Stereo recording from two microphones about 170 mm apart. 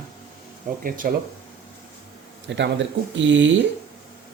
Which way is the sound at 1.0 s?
55° right (ahead or behind).